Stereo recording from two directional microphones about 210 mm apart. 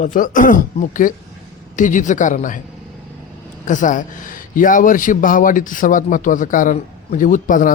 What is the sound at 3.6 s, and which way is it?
A man's voice, 35° left (ahead or behind).